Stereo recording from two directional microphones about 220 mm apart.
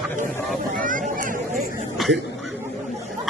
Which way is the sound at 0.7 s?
35° right (ahead or behind).